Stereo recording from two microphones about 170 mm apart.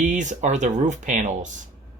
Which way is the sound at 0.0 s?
45° right (ahead or behind).